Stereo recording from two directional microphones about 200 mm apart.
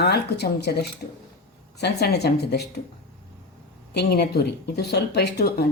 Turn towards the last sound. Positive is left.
turn(degrees=55)  # may be behind; listen again after turning